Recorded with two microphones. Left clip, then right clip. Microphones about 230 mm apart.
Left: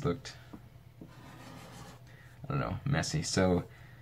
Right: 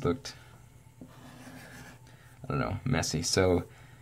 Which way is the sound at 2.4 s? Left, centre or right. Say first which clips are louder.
Right 4 dB; right.